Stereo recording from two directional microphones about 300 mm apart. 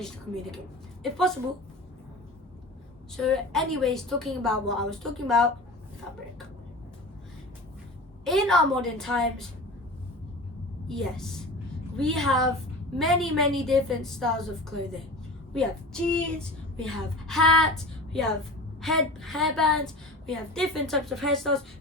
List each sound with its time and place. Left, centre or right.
1.0 s a woman's voice: centre
3.2 s a woman's voice: centre
8.2 s a woman's voice: centre
10.8 s a woman's voice: centre
15.5 s a woman's voice: centre